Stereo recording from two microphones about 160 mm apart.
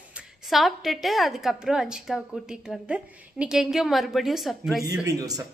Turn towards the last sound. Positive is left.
turn(degrees=-20)  # may be behind; listen again after turning